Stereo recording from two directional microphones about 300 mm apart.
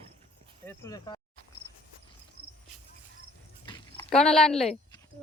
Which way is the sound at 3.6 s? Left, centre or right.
Centre.